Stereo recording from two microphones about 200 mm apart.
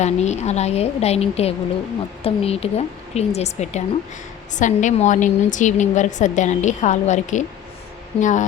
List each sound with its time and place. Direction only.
0.0 s a woman's voice: 35° left (ahead or behind)